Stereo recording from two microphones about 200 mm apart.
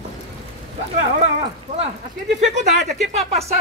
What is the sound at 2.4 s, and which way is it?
Speech, 35° right (ahead or behind).